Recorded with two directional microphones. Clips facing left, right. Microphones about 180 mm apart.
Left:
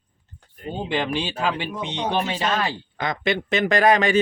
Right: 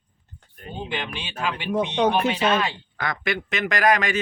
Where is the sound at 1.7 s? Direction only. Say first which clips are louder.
Right 4 dB; 70° right (ahead or behind).